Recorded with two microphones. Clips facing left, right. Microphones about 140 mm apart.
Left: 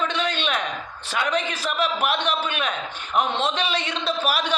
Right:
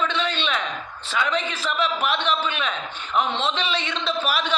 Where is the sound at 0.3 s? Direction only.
10° left (ahead or behind).